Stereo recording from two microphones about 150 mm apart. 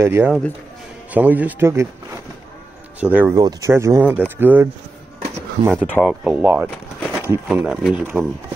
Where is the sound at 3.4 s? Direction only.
25° right (ahead or behind).